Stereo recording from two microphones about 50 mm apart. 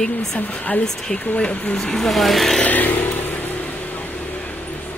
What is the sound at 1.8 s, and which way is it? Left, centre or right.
Speech, centre.